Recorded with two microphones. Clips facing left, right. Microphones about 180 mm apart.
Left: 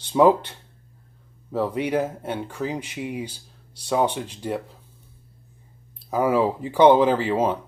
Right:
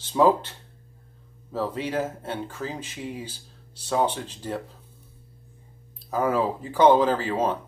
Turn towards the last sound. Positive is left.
turn(degrees=10)  # may be behind; listen again after turning